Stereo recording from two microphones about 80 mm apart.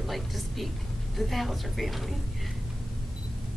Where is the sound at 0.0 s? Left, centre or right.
Centre.